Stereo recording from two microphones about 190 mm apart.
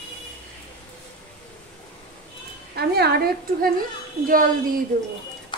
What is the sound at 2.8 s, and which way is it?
A woman's voice, 55° right (ahead or behind).